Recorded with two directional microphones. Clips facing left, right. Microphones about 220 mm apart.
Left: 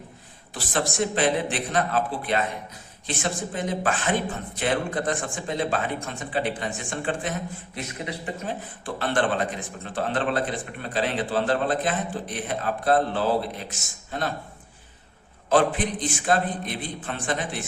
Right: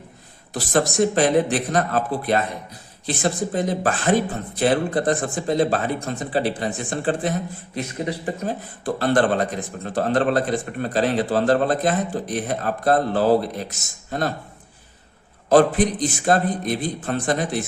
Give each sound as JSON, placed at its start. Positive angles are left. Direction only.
{"t": 0.5, "sound": "a man's voice", "side_deg": -40}
{"t": 15.4, "sound": "a man's voice", "side_deg": -40}